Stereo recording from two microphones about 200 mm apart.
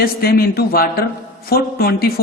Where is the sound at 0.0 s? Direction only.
50° left (ahead or behind).